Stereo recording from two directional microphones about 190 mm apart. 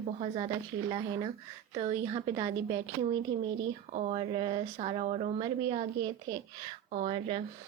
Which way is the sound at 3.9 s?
35° right (ahead or behind).